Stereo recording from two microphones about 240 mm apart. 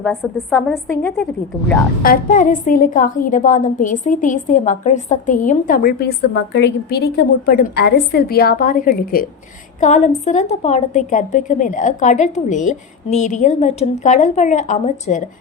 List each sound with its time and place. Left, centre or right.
0.0 s a woman's voice: centre
2.0 s a woman's voice: left